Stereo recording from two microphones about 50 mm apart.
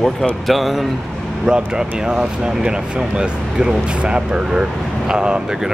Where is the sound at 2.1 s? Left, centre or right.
Centre.